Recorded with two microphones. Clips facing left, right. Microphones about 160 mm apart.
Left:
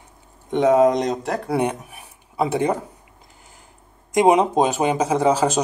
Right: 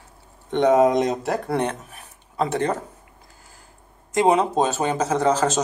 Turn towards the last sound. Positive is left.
turn(degrees=10)  # may be behind; listen again after turning